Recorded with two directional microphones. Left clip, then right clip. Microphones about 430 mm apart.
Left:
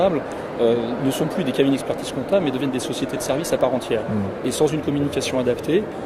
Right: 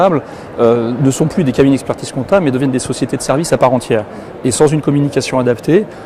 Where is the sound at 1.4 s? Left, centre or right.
Right.